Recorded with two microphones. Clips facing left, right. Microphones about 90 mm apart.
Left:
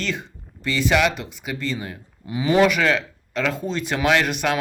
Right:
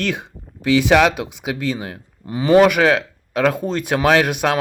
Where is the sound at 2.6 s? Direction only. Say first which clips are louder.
Right 4 dB; 60° right (ahead or behind).